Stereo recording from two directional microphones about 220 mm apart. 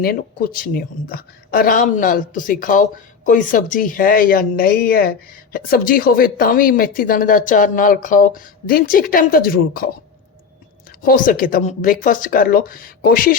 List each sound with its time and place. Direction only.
0.0 s speech: 40° left (ahead or behind)
11.0 s speech: 40° left (ahead or behind)